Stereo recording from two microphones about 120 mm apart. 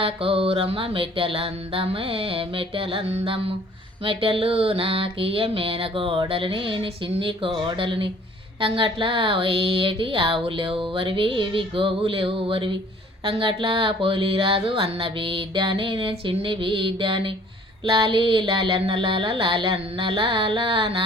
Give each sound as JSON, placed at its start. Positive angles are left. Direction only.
{"t": 0.0, "sound": "speech", "side_deg": -50}